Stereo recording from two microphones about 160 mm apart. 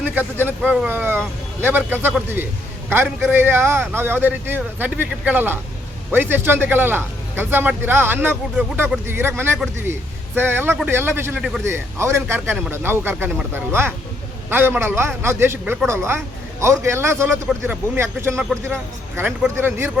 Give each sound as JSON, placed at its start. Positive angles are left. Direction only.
{"t": 0.1, "sound": "a man's voice", "side_deg": -10}
{"t": 11.3, "sound": "speech", "side_deg": -5}
{"t": 11.6, "sound": "a man's voice", "side_deg": -15}
{"t": 18.3, "sound": "speech", "side_deg": 5}
{"t": 19.1, "sound": "a man's voice", "side_deg": -15}